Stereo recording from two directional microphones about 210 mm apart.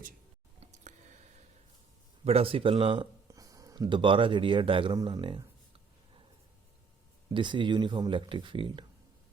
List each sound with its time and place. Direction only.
0.6 s a sound: 35° right (ahead or behind)
2.2 s speech: 25° right (ahead or behind)
7.3 s speech: 25° right (ahead or behind)